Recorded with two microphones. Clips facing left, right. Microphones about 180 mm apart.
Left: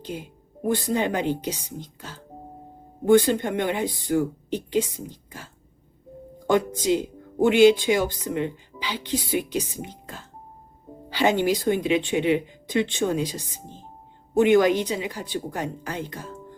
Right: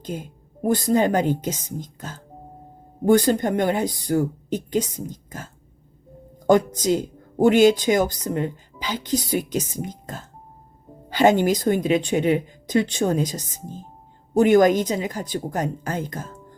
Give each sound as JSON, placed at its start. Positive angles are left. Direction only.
{"t": 0.0, "sound": "speech", "side_deg": -45}
{"t": 6.5, "sound": "speech", "side_deg": -40}